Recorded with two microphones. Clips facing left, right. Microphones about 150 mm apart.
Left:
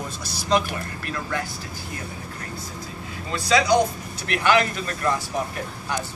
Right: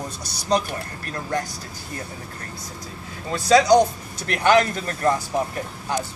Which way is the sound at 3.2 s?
45° right (ahead or behind).